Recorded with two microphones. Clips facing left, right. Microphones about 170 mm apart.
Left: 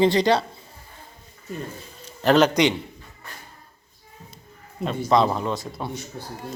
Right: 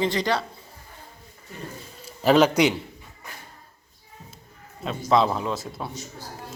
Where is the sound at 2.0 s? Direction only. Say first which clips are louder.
Even; 5° right (ahead or behind).